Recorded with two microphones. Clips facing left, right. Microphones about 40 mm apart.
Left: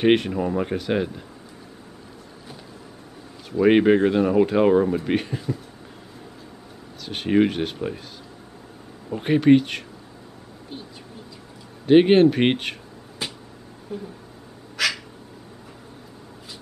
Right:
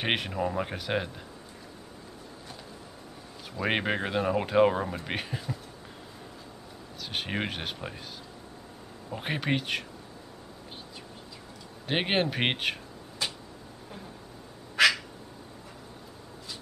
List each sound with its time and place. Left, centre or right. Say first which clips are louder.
0.0 s speech: left 10 dB; centre
3.5 s speech: left 12 dB; centre
7.0 s speech: left 12 dB; centre
9.1 s speech: left 14 dB; centre
11.8 s speech: left 14 dB; centre
13.2 s a sound: left 2 dB; centre